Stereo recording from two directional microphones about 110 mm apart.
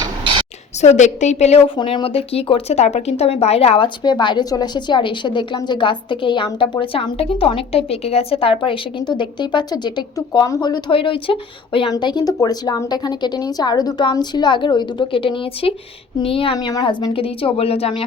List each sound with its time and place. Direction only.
0.8 s a woman's voice: 90° left
1.6 s a woman's voice: 50° left (ahead or behind)
11.9 s a woman's voice: 40° left (ahead or behind)
16.6 s a woman's voice: 40° left (ahead or behind); by 18.0 s 65° left (ahead or behind)